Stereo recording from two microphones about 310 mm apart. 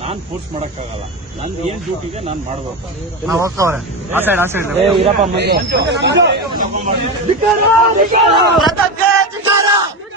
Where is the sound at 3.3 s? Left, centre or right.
Centre.